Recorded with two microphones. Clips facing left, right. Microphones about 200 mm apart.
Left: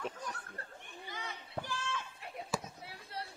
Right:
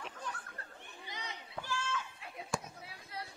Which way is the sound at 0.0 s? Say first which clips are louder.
Left 3 dB; 40° left (ahead or behind).